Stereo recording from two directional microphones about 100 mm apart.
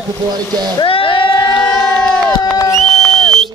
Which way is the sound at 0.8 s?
60° left (ahead or behind).